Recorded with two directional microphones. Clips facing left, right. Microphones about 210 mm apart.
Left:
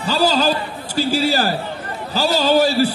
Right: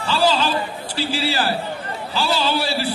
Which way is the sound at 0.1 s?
40° left (ahead or behind).